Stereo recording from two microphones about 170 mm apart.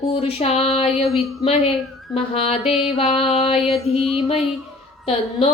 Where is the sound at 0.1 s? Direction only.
35° left (ahead or behind).